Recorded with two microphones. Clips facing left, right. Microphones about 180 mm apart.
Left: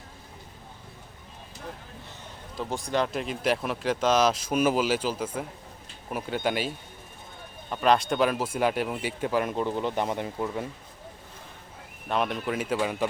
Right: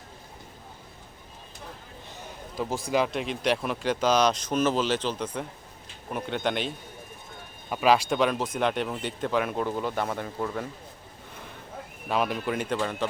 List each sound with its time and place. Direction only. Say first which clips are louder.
2.6 s speech: right 2 dB; 5° right (ahead or behind)
7.7 s speech: right 1 dB; 5° right (ahead or behind)
9.4 s speech: even; 5° right (ahead or behind)
9.8 s speech: left 1 dB; 15° left (ahead or behind)
12.0 s speech: right 1 dB; 5° right (ahead or behind)